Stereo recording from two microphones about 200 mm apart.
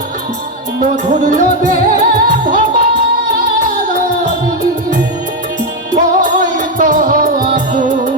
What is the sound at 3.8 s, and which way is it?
Music, 40° right (ahead or behind).